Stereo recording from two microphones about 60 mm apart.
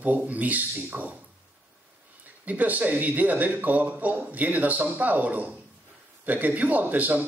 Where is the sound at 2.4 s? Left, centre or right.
Right.